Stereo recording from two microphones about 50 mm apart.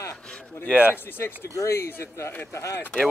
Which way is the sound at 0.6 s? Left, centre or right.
Right.